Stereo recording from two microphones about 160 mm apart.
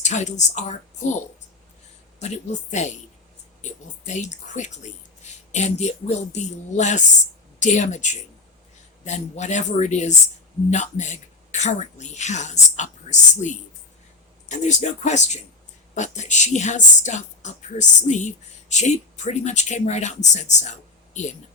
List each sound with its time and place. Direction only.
0.0 s a woman's voice: 45° left (ahead or behind)